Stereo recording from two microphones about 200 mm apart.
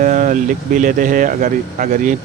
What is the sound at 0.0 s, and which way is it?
Speech, 40° right (ahead or behind).